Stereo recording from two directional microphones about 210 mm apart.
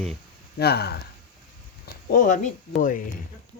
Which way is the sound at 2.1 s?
40° left (ahead or behind).